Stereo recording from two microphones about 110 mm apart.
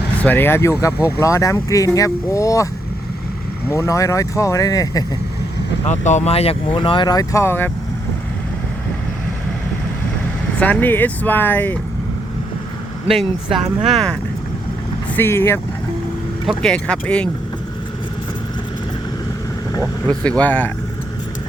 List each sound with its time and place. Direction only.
0.2 s speech: 15° left (ahead or behind)
3.7 s speech: 30° left (ahead or behind)
5.8 s speech: 90° left; by 7.4 s 35° left (ahead or behind)
7.4 s speech: 20° left (ahead or behind)
10.6 s speech: 15° left (ahead or behind)
13.1 s speech: centre (ahead or behind)
15.1 s speech: 20° left (ahead or behind)
16.7 s speech: 10° left (ahead or behind)
20.1 s speech: 10° left (ahead or behind)